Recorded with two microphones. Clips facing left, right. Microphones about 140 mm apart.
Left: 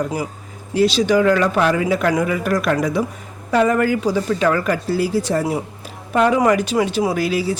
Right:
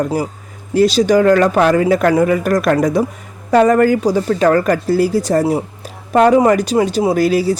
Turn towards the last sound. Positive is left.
turn(degrees=-40)  # may be behind; listen again after turning